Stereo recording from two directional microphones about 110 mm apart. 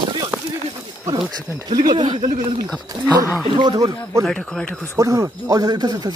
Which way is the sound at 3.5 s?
45° right (ahead or behind).